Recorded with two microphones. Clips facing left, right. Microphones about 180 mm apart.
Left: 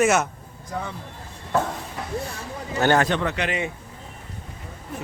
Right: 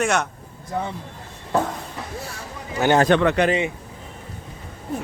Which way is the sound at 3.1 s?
70° right (ahead or behind).